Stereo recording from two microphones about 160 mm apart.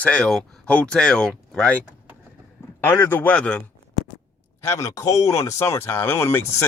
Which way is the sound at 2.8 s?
15° left (ahead or behind).